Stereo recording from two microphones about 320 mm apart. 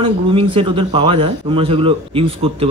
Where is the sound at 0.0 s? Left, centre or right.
Centre.